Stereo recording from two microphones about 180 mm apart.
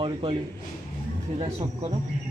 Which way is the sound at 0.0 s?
30° right (ahead or behind).